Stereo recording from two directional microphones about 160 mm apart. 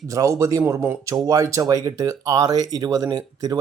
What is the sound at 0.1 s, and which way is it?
Speech, 20° right (ahead or behind).